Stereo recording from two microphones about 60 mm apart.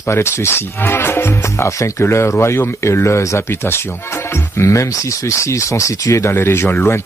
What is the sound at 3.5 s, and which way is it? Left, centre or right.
Speech, left.